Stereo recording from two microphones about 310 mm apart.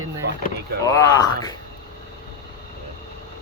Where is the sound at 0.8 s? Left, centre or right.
Centre.